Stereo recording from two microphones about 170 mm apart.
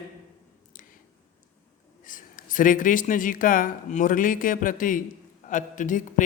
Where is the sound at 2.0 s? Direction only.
50° left (ahead or behind).